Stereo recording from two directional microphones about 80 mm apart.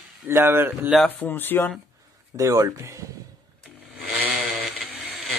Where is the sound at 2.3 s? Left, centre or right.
Right.